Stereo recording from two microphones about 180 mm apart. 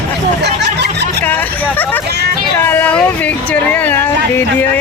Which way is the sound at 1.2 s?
10° left (ahead or behind).